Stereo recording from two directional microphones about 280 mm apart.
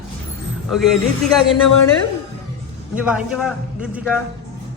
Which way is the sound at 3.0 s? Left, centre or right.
Centre.